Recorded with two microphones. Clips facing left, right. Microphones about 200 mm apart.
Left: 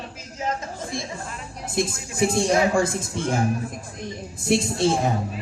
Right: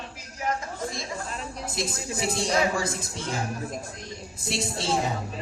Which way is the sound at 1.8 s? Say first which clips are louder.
Left 8 dB; 55° left (ahead or behind).